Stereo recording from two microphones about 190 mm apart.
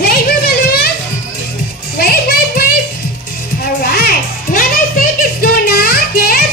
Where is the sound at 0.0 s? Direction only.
55° left (ahead or behind).